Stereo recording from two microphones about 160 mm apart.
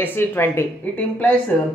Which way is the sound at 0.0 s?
10° left (ahead or behind).